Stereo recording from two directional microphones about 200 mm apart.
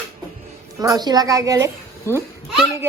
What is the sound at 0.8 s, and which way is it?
A child's voice, 20° right (ahead or behind).